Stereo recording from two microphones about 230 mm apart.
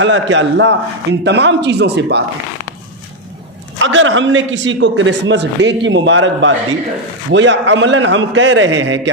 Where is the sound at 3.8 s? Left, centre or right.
Right.